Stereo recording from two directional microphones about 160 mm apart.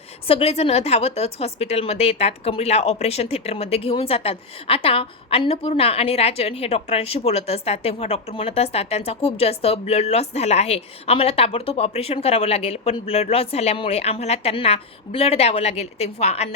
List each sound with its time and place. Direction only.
0.3 s a woman's voice: 40° left (ahead or behind)